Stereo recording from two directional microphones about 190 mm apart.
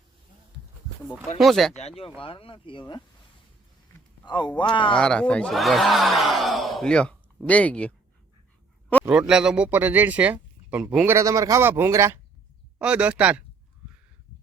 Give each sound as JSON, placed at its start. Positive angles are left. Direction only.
{"t": 1.4, "sound": "speech", "side_deg": 0}
{"t": 2.0, "sound": "speech", "side_deg": 30}
{"t": 4.3, "sound": "speech", "side_deg": 25}
{"t": 4.9, "sound": "speech", "side_deg": 5}
{"t": 9.0, "sound": "speech", "side_deg": -5}